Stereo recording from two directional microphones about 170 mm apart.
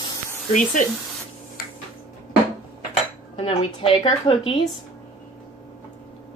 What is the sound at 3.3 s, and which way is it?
A woman's voice, 35° left (ahead or behind).